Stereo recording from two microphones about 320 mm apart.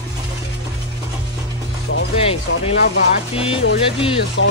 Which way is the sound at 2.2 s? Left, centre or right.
Centre.